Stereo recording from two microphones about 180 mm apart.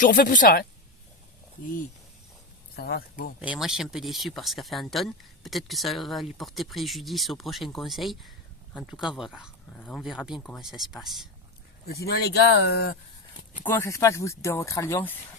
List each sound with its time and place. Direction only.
0.0 s a woman's voice: 50° left (ahead or behind)
2.7 s speech: 60° left (ahead or behind)
3.4 s speech: 5° right (ahead or behind)
9.7 s speech: 10° left (ahead or behind)
10.0 s speech: centre (ahead or behind)
12.0 s speech: 65° left (ahead or behind)
13.7 s speech: 15° left (ahead or behind)